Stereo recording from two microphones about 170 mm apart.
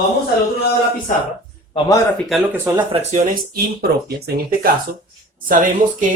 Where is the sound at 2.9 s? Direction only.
40° right (ahead or behind).